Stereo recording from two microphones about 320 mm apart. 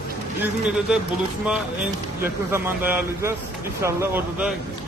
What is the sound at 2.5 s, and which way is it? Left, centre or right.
A man's voice, centre.